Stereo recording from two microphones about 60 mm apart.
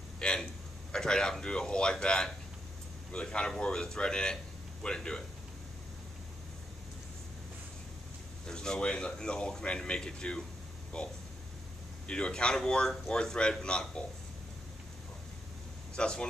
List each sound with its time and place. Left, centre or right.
0.2 s a sound: centre
0.9 s speech: centre
8.5 s speech: centre
16.0 s speech: centre